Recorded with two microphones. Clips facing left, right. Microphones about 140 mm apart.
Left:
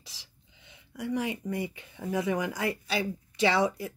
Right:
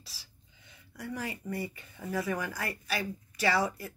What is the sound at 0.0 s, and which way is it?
Speech, 20° left (ahead or behind).